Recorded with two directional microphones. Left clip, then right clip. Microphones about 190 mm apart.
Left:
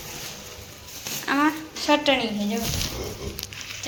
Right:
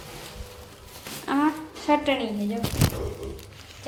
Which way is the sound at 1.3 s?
5° right (ahead or behind).